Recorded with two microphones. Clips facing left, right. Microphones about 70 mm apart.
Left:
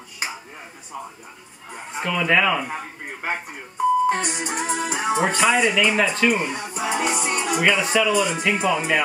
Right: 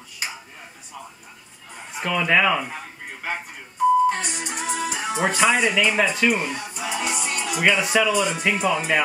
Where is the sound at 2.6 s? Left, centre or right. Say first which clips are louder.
Left 4 dB; left.